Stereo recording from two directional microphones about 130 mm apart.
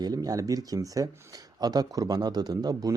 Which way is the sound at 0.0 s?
30° right (ahead or behind).